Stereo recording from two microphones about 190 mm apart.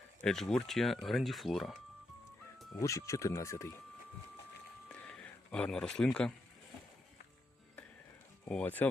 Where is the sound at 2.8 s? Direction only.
15° left (ahead or behind).